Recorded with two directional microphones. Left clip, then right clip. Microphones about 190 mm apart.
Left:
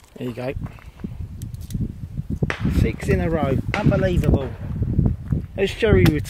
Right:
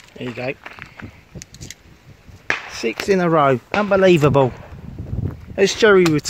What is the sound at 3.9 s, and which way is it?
Speech, 50° right (ahead or behind).